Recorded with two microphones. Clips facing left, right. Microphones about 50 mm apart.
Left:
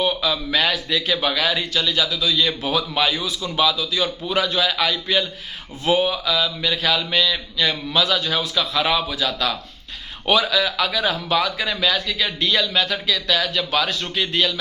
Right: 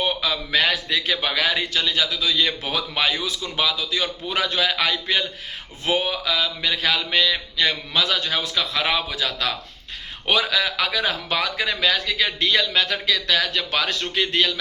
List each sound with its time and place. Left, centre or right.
0.0 s a man's voice: right